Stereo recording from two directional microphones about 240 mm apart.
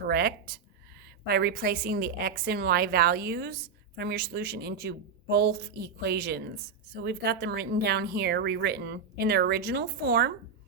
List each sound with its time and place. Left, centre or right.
0.1 s a woman's voice: right